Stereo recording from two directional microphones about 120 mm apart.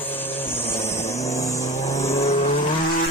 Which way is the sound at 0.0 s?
15° left (ahead or behind).